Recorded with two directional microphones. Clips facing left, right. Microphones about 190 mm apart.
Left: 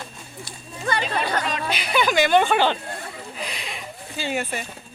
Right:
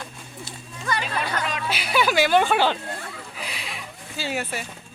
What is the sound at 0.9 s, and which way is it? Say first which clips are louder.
Speech: left 3 dB; 35° left (ahead or behind).